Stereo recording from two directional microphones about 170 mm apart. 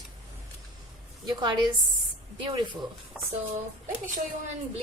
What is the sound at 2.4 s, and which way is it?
Speech, 25° right (ahead or behind).